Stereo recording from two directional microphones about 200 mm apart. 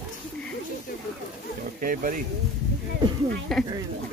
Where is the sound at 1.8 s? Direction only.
45° right (ahead or behind).